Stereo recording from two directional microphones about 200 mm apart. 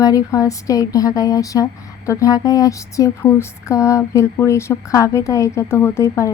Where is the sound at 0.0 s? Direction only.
15° left (ahead or behind).